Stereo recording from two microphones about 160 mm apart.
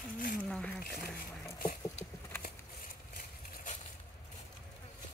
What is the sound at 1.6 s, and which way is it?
Patter, 55° left (ahead or behind).